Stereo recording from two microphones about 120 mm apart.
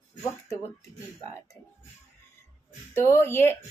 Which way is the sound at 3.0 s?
20° left (ahead or behind).